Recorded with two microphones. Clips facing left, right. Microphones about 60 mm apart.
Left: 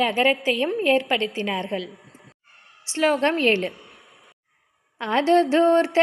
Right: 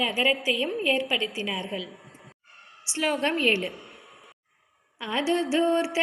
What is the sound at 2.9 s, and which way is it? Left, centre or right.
Speech, left.